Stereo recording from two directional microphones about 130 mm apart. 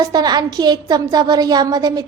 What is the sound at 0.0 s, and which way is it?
A woman's voice, 30° right (ahead or behind).